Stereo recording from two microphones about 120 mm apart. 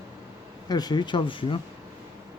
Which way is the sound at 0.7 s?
35° left (ahead or behind).